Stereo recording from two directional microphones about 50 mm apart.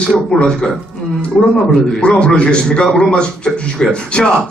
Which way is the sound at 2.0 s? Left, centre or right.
Centre.